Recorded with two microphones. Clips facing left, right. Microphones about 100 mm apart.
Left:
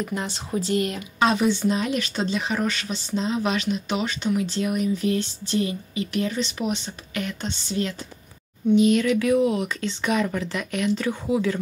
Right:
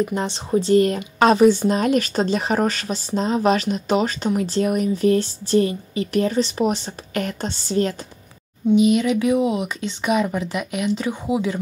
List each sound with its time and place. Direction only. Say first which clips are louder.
0.0 s speech: right 6 dB; 30° right (ahead or behind)
1.2 s speech: right 6 dB; 45° right (ahead or behind)
8.7 s speech: right 2 dB; 15° right (ahead or behind)